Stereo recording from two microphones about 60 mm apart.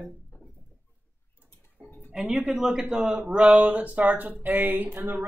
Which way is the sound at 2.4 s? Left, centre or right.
Centre.